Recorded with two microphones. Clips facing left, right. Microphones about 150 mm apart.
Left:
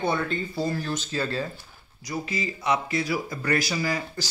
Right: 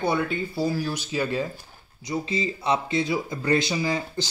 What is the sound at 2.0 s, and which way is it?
Speech, 25° right (ahead or behind).